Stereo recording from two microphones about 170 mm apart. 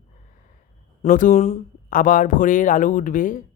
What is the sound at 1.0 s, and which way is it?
Speech, 50° left (ahead or behind).